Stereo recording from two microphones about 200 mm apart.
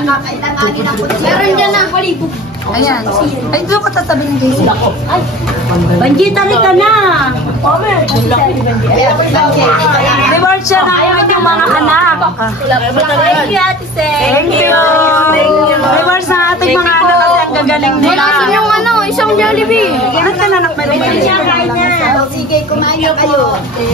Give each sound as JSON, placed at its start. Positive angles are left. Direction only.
{"t": 3.5, "sound": "a woman's voice", "side_deg": 15}
{"t": 6.1, "sound": "a woman's voice", "side_deg": 0}
{"t": 14.3, "sound": "a woman's voice", "side_deg": 10}
{"t": 16.0, "sound": "a sound", "side_deg": 15}
{"t": 17.6, "sound": "speech", "side_deg": 5}
{"t": 21.3, "sound": "speech", "side_deg": 45}